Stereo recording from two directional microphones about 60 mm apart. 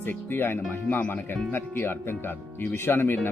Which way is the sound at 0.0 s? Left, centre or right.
Left.